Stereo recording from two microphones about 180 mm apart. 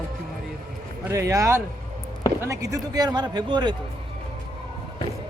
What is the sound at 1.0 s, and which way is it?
Speech, 15° right (ahead or behind).